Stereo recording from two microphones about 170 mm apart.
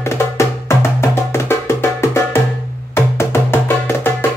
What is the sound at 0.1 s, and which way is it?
Music, 15° left (ahead or behind).